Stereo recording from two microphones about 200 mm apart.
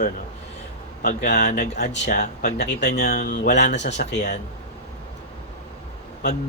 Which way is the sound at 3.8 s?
60° left (ahead or behind).